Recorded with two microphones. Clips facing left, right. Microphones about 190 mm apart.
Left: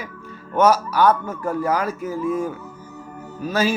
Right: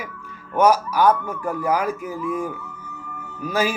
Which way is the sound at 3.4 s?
10° right (ahead or behind).